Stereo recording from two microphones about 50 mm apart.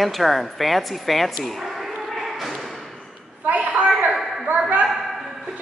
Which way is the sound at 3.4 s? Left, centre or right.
Right.